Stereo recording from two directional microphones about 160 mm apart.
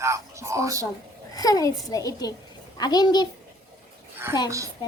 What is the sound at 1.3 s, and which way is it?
A child's voice, 20° left (ahead or behind).